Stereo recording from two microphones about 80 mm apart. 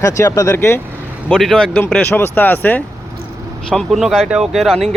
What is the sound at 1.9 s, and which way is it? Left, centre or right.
Speech, left.